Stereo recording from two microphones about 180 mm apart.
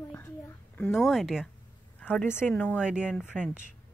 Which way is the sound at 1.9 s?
10° left (ahead or behind).